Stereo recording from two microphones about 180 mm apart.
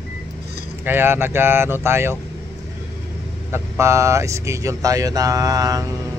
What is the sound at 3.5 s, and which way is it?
Speech, 15° right (ahead or behind).